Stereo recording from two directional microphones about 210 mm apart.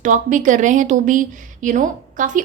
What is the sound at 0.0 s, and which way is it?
Speech, 35° right (ahead or behind).